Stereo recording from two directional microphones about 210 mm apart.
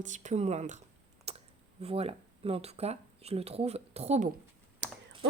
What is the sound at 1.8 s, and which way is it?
Speech, 30° right (ahead or behind).